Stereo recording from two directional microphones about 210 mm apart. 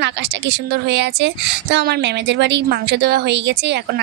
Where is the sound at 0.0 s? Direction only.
60° right (ahead or behind).